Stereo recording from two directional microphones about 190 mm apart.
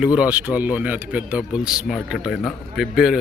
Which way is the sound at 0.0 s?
5° right (ahead or behind).